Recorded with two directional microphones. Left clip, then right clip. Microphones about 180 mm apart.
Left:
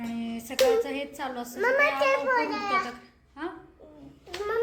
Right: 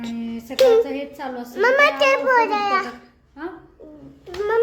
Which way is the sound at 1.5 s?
40° right (ahead or behind).